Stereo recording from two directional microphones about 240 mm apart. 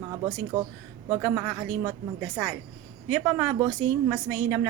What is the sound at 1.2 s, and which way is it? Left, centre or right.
Speech, centre.